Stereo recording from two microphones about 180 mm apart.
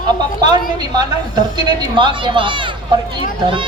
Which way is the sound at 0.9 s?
25° right (ahead or behind).